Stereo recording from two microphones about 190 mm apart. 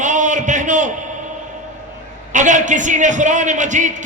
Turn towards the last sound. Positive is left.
turn(degrees=-40)  # may be behind; listen again after turning